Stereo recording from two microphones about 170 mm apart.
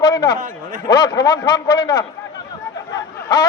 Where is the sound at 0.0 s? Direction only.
25° left (ahead or behind).